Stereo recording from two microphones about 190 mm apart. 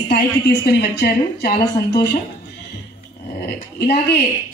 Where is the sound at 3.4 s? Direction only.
55° left (ahead or behind).